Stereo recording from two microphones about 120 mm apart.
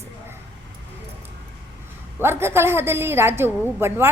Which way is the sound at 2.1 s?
20° right (ahead or behind).